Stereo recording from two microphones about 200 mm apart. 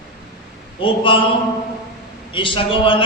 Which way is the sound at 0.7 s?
25° left (ahead or behind).